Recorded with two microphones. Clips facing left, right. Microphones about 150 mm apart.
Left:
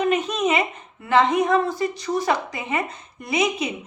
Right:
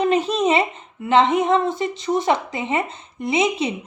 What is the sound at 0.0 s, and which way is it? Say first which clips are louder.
Speech: right 3 dB; 30° right (ahead or behind).